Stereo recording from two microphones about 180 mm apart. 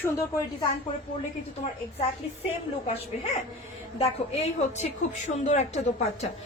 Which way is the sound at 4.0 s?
35° left (ahead or behind).